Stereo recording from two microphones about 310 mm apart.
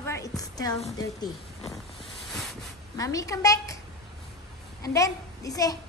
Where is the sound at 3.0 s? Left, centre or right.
Centre.